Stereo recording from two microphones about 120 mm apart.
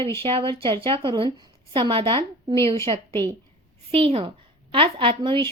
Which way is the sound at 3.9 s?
55° right (ahead or behind).